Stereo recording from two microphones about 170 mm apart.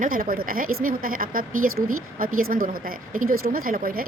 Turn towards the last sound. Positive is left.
turn(degrees=-55)  # may be behind; listen again after turning